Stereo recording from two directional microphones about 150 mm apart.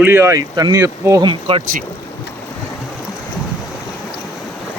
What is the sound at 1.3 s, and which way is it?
Speech, 35° right (ahead or behind).